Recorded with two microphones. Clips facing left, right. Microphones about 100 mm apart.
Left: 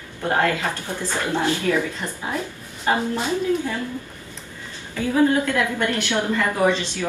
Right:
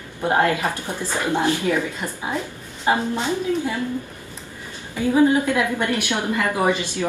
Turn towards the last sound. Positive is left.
turn(degrees=-15)  # may be behind; listen again after turning